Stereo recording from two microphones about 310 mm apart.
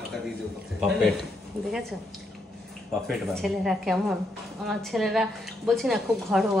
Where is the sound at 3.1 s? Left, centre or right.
Centre.